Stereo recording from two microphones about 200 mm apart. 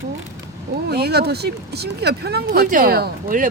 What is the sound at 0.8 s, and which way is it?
Speech, 55° right (ahead or behind).